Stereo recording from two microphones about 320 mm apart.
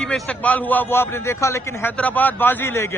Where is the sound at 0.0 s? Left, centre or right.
Centre.